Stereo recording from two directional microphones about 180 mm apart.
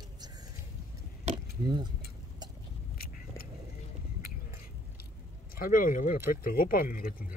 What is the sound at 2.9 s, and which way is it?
Vehicle, 55° left (ahead or behind).